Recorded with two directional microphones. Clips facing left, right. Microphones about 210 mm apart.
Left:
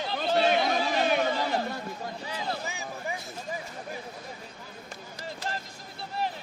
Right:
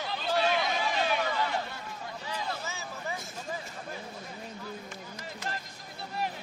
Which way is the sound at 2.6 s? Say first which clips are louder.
Left 3 dB; 15° left (ahead or behind).